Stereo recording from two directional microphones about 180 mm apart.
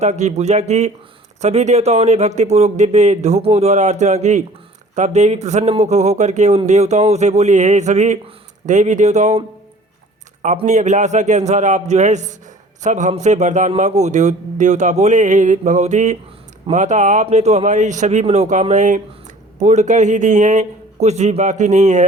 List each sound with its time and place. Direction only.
0.0 s a man's voice: 40° right (ahead or behind)
10.4 s a man's voice: 40° right (ahead or behind)